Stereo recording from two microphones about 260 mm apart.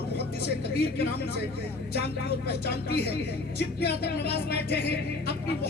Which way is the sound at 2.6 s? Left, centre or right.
Left.